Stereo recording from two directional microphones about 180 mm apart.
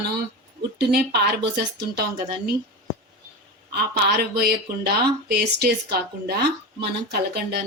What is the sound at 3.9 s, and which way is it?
Speech, 60° right (ahead or behind).